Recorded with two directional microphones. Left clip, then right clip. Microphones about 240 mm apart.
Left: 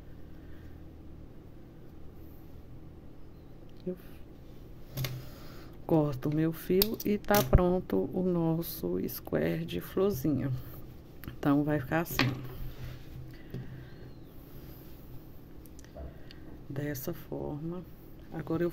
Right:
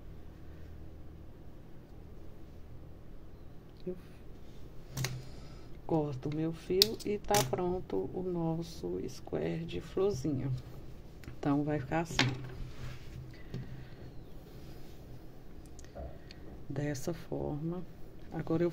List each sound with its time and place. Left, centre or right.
3.9 s speech: centre
5.9 s speech: left
16.7 s speech: centre